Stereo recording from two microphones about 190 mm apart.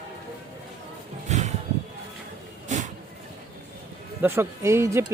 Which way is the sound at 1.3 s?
40° right (ahead or behind).